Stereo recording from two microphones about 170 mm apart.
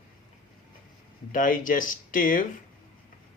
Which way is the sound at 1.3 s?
50° left (ahead or behind).